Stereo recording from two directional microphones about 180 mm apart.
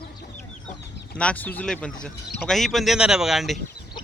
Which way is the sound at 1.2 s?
10° left (ahead or behind).